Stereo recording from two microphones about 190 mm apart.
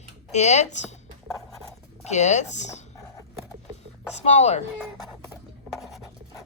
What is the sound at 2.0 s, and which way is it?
Speech, 35° left (ahead or behind).